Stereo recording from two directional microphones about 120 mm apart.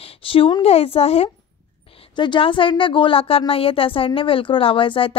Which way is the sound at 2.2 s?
45° left (ahead or behind).